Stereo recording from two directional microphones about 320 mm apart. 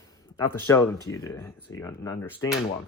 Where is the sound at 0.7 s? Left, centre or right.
Centre.